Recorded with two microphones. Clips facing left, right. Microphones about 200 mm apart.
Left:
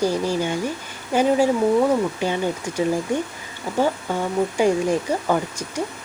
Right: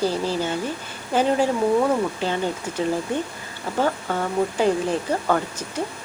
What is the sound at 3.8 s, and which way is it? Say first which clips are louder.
Speech: left 2 dB; 10° left (ahead or behind).